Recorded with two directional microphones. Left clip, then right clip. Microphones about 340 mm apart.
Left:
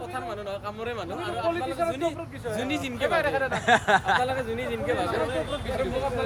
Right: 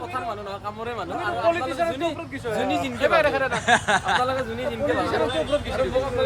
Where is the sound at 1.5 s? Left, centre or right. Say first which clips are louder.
Right 3 dB; right.